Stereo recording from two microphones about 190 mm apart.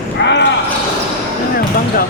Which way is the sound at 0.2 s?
65° left (ahead or behind).